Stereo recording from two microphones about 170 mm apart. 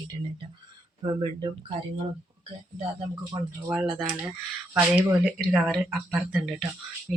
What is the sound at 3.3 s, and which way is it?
Speech, 10° right (ahead or behind).